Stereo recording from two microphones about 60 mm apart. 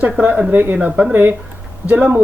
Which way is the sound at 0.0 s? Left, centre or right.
Right.